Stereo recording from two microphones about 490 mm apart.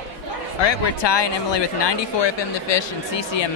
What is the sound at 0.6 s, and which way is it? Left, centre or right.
Speech, left.